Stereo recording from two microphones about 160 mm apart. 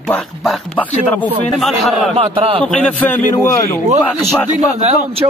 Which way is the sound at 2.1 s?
35° right (ahead or behind).